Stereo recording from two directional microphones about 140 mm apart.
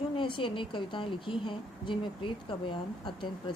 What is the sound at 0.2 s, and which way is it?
A woman's voice, 35° left (ahead or behind).